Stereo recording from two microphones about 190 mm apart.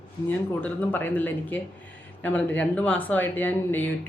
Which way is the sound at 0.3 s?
10° left (ahead or behind).